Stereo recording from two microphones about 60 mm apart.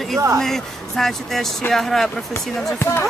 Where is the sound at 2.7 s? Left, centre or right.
Left.